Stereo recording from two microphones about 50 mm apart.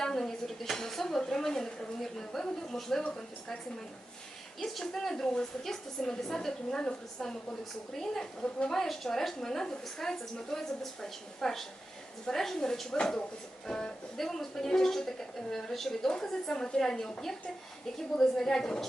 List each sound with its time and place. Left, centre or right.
0.0 s dishes: centre
1.2 s a woman's voice: centre
4.6 s a woman's voice: centre
8.4 s a woman's voice: left
8.7 s a woman's voice: centre